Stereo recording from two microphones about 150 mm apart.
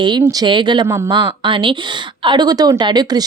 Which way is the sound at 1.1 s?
30° right (ahead or behind).